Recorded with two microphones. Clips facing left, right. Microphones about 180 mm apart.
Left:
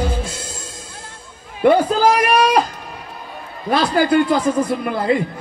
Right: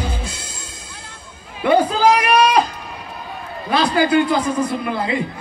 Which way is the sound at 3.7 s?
45° left (ahead or behind).